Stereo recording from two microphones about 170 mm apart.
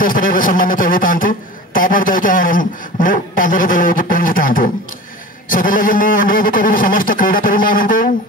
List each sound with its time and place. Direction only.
0.0 s a man's voice: 55° left (ahead or behind)